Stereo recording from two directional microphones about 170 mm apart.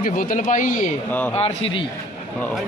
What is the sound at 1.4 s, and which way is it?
Speech, 30° left (ahead or behind).